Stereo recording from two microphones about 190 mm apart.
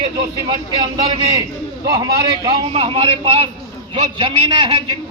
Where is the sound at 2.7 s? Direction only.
30° right (ahead or behind).